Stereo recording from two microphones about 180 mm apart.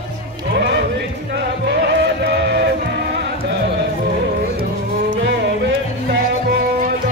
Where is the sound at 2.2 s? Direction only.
70° right (ahead or behind).